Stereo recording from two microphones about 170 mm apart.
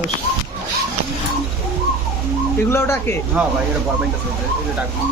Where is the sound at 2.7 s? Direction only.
15° left (ahead or behind).